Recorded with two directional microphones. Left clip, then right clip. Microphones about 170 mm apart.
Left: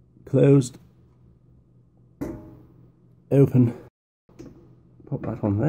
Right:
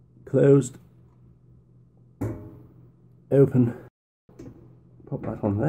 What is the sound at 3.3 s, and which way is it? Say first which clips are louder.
Speech: even; 25° left (ahead or behind).